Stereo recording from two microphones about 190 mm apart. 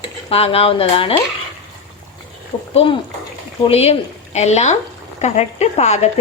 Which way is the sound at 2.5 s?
25° left (ahead or behind).